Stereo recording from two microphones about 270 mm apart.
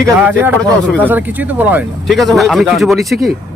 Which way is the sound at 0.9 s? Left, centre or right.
Centre.